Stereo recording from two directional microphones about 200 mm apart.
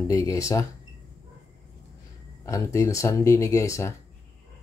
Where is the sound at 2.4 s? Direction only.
15° left (ahead or behind).